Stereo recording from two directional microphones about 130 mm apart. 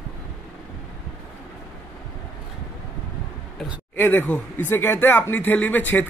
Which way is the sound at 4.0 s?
15° left (ahead or behind).